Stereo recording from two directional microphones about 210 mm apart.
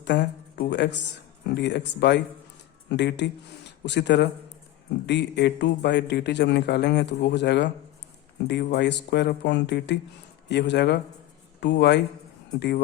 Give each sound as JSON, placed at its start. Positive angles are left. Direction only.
{"t": 0.0, "sound": "a man's voice", "side_deg": 55}